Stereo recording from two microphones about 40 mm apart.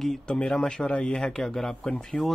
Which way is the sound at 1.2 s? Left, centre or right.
Centre.